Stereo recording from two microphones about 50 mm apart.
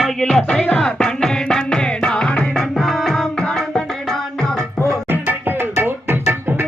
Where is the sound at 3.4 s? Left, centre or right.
Centre.